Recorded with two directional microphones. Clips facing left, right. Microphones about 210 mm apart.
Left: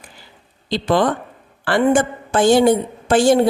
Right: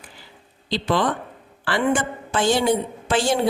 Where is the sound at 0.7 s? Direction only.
45° left (ahead or behind).